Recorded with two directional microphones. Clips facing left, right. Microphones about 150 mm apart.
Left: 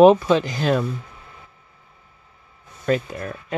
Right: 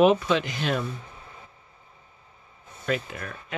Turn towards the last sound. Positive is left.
turn(degrees=40)  # may be behind; listen again after turning